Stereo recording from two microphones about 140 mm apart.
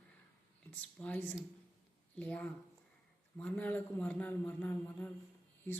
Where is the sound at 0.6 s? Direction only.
10° left (ahead or behind).